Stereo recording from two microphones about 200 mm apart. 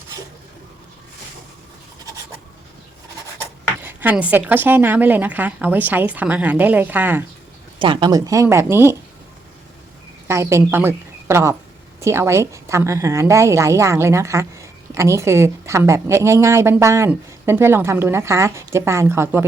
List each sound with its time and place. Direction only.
3.8 s a woman's voice: 10° right (ahead or behind)
7.8 s a woman's voice: 25° right (ahead or behind)
10.2 s a woman's voice: 15° right (ahead or behind)